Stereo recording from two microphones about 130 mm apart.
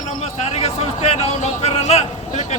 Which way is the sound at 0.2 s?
50° left (ahead or behind).